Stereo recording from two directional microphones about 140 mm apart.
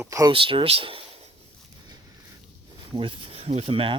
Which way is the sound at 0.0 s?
20° right (ahead or behind).